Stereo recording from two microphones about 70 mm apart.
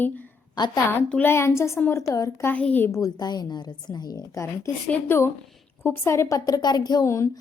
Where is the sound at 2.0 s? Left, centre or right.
Left.